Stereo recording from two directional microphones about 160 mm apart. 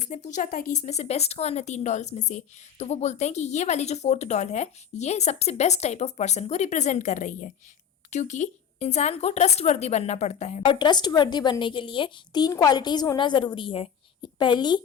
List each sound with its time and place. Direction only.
0.0 s speech: 50° left (ahead or behind)
10.7 s a woman's voice: 30° left (ahead or behind)